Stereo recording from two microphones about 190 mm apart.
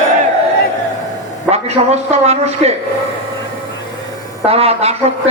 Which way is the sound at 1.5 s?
35° right (ahead or behind).